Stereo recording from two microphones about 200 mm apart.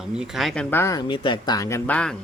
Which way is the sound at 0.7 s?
15° left (ahead or behind).